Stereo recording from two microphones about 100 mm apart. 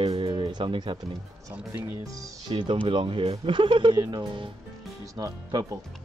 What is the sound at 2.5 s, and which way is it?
Speech, 55° right (ahead or behind).